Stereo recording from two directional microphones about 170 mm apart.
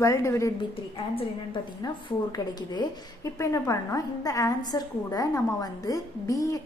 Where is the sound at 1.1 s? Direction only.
30° left (ahead or behind).